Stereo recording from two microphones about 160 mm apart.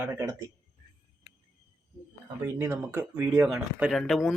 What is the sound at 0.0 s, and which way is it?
Speech, 15° right (ahead or behind).